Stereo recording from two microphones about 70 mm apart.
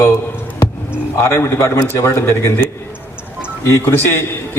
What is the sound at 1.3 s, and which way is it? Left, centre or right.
A man's voice, left.